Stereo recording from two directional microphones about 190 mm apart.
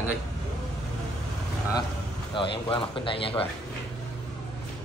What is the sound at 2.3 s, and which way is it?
Speech, 25° left (ahead or behind).